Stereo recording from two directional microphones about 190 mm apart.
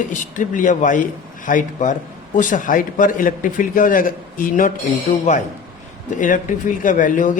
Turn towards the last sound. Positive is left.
turn(degrees=45)  # may be behind; listen again after turning